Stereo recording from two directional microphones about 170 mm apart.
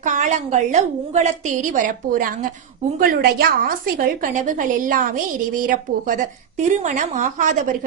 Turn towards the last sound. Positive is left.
turn(degrees=-45)  # may be behind; listen again after turning